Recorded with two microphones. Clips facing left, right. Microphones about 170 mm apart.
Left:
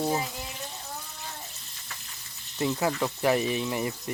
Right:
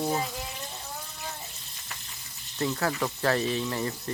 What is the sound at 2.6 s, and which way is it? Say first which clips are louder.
Speech: left 1 dB; 15° left (ahead or behind).